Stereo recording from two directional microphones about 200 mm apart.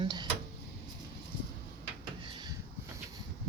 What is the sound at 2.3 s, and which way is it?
Drawer open or close, 25° right (ahead or behind).